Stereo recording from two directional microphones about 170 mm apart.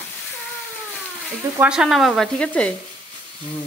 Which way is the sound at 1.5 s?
5° right (ahead or behind).